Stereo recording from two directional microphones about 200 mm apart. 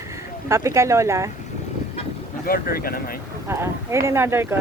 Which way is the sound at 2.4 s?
45° left (ahead or behind).